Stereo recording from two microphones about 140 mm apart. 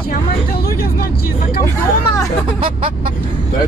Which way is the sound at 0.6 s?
90° left.